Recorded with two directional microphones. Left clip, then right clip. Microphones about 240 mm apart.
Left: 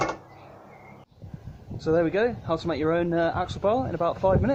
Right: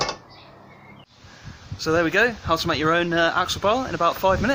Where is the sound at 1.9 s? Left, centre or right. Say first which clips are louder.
Right 3 dB; right.